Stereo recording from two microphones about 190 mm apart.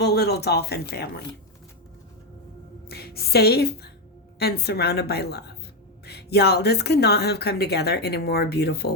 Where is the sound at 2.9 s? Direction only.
55° left (ahead or behind).